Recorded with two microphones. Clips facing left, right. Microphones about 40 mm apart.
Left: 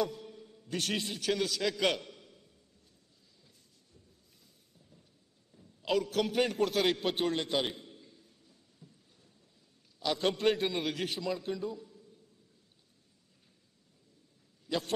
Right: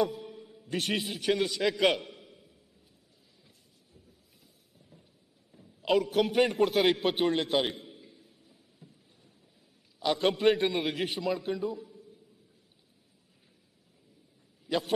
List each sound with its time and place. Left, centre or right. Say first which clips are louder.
0.0 s a man's voice: right 4 dB; centre
4.7 s a sound: right 4 dB; centre
9.9 s a man's voice: right 4 dB; centre
14.7 s a man's voice: right 4 dB; centre